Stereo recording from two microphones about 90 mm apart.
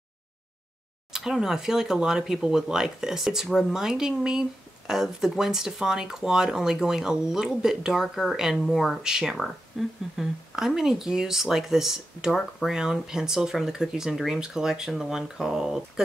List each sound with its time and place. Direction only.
1.1 s speech: 5° right (ahead or behind)